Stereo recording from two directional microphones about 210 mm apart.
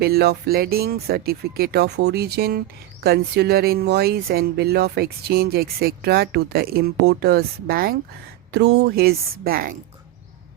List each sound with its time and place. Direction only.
0.0 s speech: 50° right (ahead or behind)